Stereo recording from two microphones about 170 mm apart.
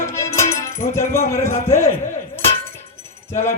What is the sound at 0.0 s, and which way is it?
Music, 15° left (ahead or behind).